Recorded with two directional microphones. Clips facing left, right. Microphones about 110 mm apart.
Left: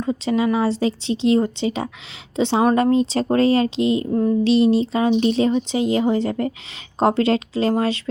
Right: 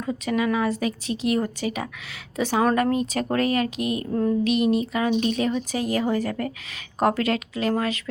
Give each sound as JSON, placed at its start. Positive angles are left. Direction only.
{"t": 0.0, "sound": "speech", "side_deg": 30}
{"t": 4.1, "sound": "a sound", "side_deg": 15}
{"t": 4.4, "sound": "speech", "side_deg": 30}